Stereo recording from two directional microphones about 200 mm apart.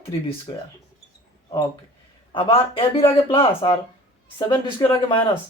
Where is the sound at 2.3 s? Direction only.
25° left (ahead or behind).